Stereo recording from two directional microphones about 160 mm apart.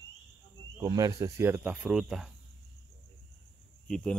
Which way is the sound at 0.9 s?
20° right (ahead or behind).